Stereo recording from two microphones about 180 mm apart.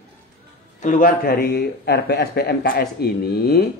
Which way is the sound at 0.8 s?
50° left (ahead or behind).